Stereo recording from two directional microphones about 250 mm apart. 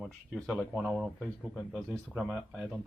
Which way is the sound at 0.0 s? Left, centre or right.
Centre.